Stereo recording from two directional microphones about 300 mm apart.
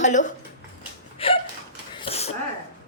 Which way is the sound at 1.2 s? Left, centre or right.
Centre.